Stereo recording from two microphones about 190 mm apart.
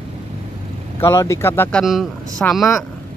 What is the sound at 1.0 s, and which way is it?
Speech, 15° left (ahead or behind).